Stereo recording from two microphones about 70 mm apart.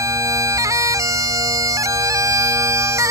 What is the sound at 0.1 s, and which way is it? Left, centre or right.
Bagpipes, right.